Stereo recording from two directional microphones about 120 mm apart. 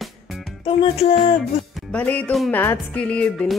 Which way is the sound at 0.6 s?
55° left (ahead or behind).